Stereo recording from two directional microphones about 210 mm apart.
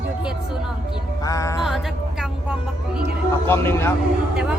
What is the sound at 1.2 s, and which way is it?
Music, 15° left (ahead or behind).